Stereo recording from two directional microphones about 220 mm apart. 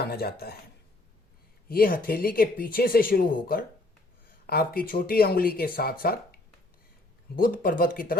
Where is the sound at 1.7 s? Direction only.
40° left (ahead or behind).